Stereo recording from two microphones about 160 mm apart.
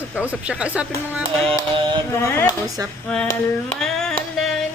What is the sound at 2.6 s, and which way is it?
Speech, 20° right (ahead or behind).